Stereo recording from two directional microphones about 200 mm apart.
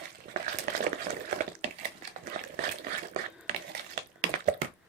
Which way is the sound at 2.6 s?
40° right (ahead or behind).